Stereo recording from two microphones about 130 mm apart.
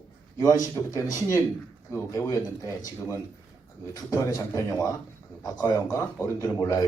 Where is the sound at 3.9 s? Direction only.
25° left (ahead or behind).